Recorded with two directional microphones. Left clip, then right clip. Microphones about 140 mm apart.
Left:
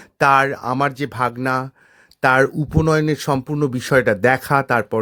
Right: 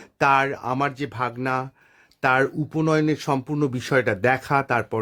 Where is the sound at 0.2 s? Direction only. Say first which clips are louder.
Left 5 dB; 30° left (ahead or behind).